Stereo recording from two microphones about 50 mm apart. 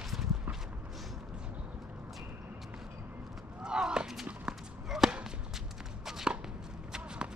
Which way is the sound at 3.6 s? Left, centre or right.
Centre.